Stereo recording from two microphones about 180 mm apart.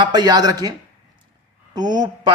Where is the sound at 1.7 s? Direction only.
20° right (ahead or behind).